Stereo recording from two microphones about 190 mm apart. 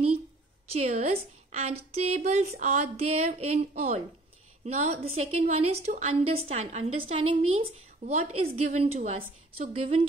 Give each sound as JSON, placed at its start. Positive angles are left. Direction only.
{"t": 0.7, "sound": "a woman's voice", "side_deg": -35}